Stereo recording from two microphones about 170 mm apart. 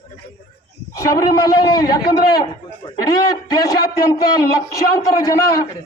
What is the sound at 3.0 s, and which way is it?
Speech, 20° left (ahead or behind).